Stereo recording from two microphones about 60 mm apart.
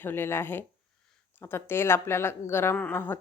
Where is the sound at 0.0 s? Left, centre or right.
Left.